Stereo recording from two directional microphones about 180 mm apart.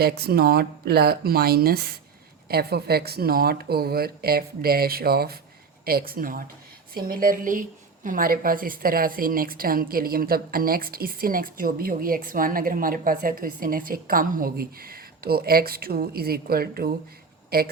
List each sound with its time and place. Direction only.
0.0 s a woman's voice: 60° right (ahead or behind)